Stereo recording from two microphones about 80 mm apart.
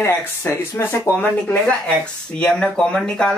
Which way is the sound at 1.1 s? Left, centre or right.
Centre.